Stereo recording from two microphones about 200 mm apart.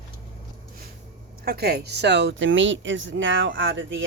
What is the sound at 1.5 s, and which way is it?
Speech, 50° right (ahead or behind).